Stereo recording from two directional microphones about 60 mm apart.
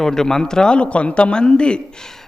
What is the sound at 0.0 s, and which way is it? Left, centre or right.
A man's voice, centre.